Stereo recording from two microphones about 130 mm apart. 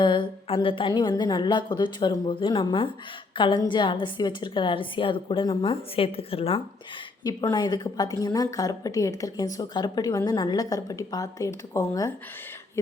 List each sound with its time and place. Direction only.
0.0 s a woman's voice: 35° left (ahead or behind)
7.3 s a woman's voice: 30° left (ahead or behind)